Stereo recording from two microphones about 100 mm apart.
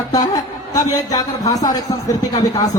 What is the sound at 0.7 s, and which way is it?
Speech, 40° left (ahead or behind).